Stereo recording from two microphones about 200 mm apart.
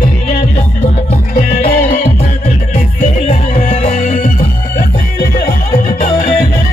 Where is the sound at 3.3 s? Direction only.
35° left (ahead or behind).